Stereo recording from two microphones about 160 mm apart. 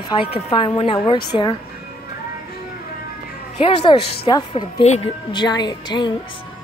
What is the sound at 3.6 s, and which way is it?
A woman's voice, 30° left (ahead or behind).